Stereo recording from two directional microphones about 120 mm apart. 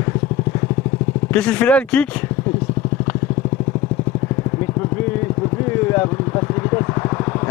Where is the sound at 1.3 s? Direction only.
10° left (ahead or behind).